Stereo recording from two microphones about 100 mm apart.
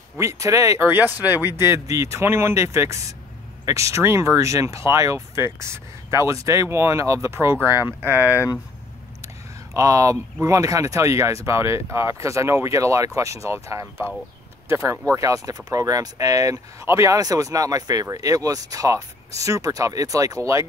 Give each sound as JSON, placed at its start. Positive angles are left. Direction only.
{"t": 0.2, "sound": "speech", "side_deg": -30}
{"t": 1.6, "sound": "speech", "side_deg": -30}
{"t": 9.8, "sound": "speech", "side_deg": -35}